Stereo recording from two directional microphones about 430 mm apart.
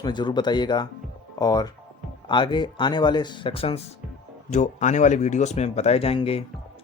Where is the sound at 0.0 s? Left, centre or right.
Centre.